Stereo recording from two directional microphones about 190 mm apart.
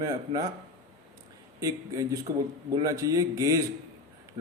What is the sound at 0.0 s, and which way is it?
Speech, 20° right (ahead or behind).